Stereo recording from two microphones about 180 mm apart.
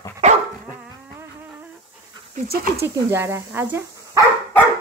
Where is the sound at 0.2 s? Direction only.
40° right (ahead or behind).